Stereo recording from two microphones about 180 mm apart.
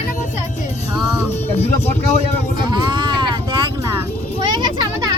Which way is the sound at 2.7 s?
25° right (ahead or behind).